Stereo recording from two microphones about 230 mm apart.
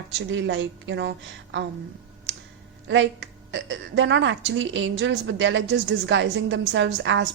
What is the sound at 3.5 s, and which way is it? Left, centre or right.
A woman's voice, right.